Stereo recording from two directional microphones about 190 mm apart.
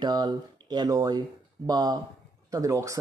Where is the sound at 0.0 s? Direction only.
20° right (ahead or behind).